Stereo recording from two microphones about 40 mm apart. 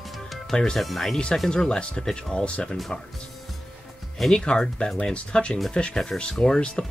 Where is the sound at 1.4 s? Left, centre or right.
Centre.